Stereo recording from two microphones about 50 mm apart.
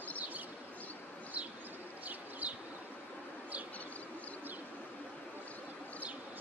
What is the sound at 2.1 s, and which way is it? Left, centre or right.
Bee, right.